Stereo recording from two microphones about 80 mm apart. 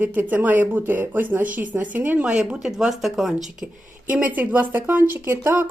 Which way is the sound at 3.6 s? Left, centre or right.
Centre.